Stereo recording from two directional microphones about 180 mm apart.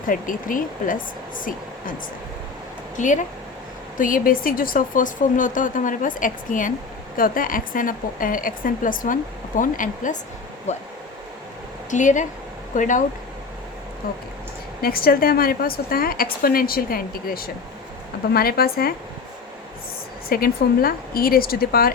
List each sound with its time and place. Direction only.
0.1 s speech: 50° left (ahead or behind)
2.9 s speech: 45° left (ahead or behind)
11.9 s speech: 45° left (ahead or behind)
14.8 s a woman's voice: 55° left (ahead or behind)
20.3 s a woman's voice: 55° left (ahead or behind)